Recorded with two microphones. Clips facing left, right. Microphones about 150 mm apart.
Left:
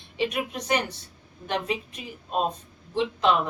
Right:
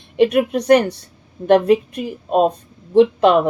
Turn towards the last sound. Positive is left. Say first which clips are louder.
# right 11 dB
turn(degrees=-60)  # may be behind; listen again after turning